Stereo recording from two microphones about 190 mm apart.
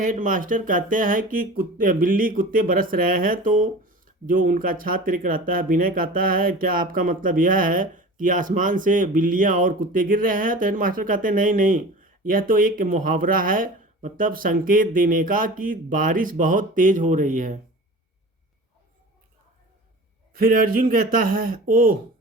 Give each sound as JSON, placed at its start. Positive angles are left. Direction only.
{"t": 0.0, "sound": "speech", "side_deg": -45}
{"t": 20.3, "sound": "speech", "side_deg": -45}